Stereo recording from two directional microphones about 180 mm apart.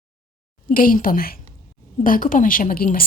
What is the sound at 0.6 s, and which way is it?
Speech, 50° left (ahead or behind).